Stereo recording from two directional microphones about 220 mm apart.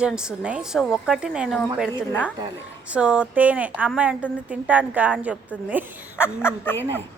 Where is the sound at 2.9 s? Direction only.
5° right (ahead or behind).